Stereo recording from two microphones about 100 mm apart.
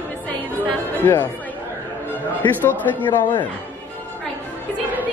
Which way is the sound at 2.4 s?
20° left (ahead or behind).